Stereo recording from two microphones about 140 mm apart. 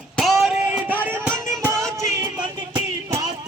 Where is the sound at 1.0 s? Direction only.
15° right (ahead or behind).